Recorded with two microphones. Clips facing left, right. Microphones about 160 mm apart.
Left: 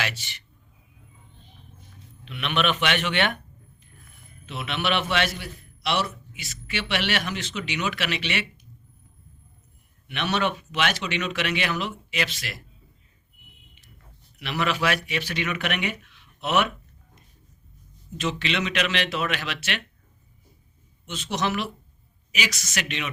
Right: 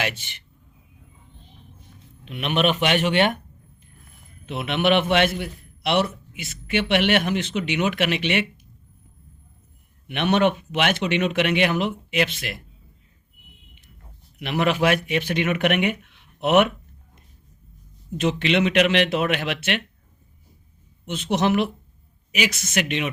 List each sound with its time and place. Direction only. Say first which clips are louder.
0.0 s speech: right 4 dB; 50° right (ahead or behind)
2.2 s a man's voice: right 4 dB; 40° right (ahead or behind)
4.4 s a man's voice: right 7 dB; 55° right (ahead or behind)
10.1 s a man's voice: right 6 dB; 50° right (ahead or behind)
14.3 s a man's voice: right 5 dB; 50° right (ahead or behind)
18.2 s a man's voice: right 7 dB; 55° right (ahead or behind)
21.1 s a man's voice: right 6 dB; 55° right (ahead or behind)